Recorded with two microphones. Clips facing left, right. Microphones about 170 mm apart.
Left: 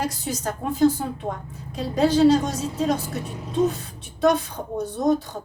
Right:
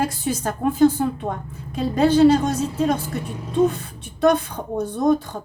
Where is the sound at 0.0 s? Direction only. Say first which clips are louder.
Right 4 dB; 55° right (ahead or behind).